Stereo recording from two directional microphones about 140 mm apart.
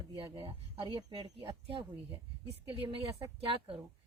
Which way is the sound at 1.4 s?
40° right (ahead or behind).